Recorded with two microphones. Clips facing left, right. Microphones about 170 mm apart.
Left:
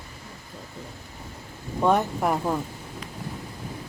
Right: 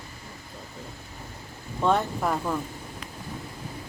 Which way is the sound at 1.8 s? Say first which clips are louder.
Left 2 dB; 15° left (ahead or behind).